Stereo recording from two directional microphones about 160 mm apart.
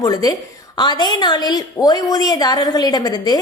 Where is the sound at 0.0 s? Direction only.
25° left (ahead or behind).